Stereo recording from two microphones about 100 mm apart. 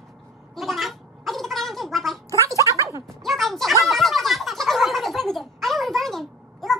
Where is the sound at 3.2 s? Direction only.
Centre (ahead or behind).